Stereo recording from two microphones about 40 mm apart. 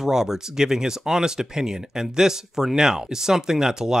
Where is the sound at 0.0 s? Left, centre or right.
Centre.